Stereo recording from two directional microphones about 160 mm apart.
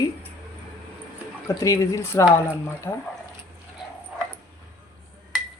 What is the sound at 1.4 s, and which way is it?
Speech, 20° left (ahead or behind).